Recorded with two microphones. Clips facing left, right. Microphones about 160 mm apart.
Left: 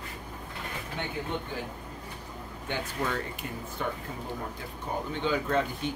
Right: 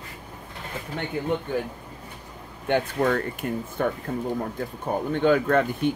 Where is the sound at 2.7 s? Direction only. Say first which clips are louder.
Right 10 dB; 55° right (ahead or behind).